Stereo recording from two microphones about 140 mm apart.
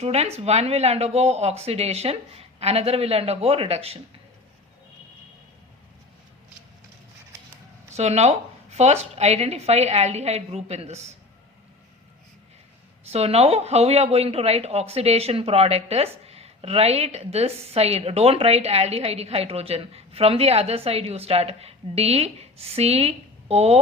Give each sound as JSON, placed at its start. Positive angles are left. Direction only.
{"t": 0.0, "sound": "speech", "side_deg": -50}
{"t": 7.9, "sound": "speech", "side_deg": -50}
{"t": 13.1, "sound": "speech", "side_deg": -45}